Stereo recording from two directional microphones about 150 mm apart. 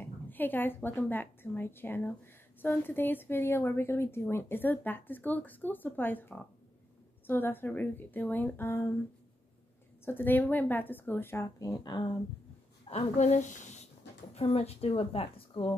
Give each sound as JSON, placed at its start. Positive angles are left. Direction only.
{"t": 0.0, "sound": "a woman's voice", "side_deg": 10}
{"t": 10.0, "sound": "speech", "side_deg": 15}
{"t": 12.9, "sound": "a woman's voice", "side_deg": 50}